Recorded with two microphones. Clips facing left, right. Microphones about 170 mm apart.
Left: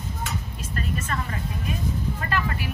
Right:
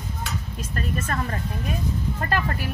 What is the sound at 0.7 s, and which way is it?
Speech, 45° right (ahead or behind).